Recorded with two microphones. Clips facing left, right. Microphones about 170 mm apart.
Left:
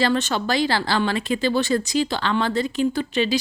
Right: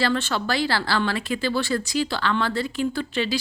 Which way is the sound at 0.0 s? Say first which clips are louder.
Left 3 dB; 20° left (ahead or behind).